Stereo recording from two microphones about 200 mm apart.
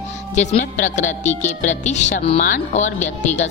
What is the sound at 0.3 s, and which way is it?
A woman's voice, 35° left (ahead or behind).